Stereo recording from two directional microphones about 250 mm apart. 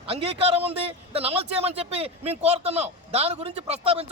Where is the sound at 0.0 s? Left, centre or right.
Right.